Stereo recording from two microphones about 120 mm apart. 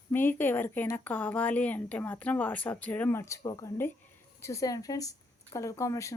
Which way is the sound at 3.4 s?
35° left (ahead or behind).